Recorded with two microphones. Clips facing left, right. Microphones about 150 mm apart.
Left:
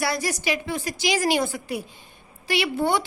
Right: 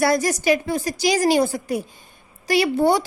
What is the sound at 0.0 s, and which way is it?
A woman's voice, 45° right (ahead or behind).